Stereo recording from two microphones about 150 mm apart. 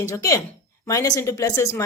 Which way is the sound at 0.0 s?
20° left (ahead or behind).